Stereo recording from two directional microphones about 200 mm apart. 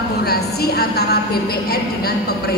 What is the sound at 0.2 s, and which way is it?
A woman's voice, 50° left (ahead or behind).